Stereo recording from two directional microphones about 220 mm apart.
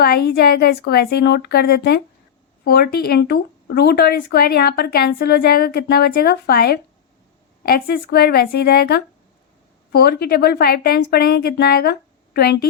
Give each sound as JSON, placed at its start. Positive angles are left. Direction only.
{"t": 0.0, "sound": "speech", "side_deg": 45}